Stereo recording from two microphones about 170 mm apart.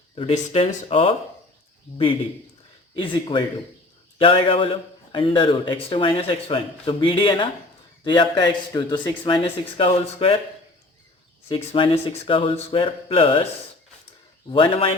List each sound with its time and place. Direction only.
0.2 s a man's voice: 35° left (ahead or behind)
2.9 s a man's voice: 30° left (ahead or behind)
11.4 s a man's voice: 30° left (ahead or behind)
14.5 s a man's voice: 30° left (ahead or behind)